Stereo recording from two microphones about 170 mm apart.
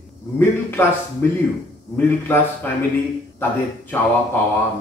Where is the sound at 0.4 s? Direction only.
15° left (ahead or behind).